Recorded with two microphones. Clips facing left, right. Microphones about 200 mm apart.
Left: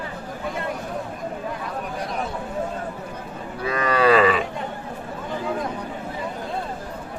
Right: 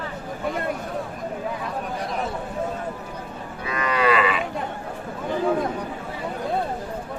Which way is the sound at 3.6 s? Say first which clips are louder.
Left 3 dB; 35° left (ahead or behind).